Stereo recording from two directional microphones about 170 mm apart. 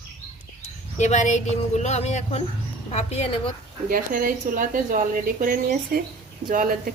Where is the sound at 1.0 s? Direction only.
45° left (ahead or behind).